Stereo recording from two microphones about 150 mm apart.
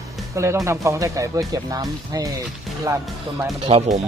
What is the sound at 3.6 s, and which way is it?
Speech, 40° right (ahead or behind).